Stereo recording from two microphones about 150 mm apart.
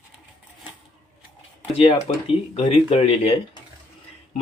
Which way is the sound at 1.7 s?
40° left (ahead or behind).